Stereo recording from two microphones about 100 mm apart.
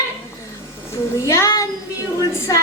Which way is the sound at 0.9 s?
30° left (ahead or behind).